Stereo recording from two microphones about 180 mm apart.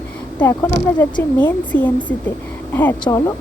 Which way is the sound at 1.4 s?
10° left (ahead or behind).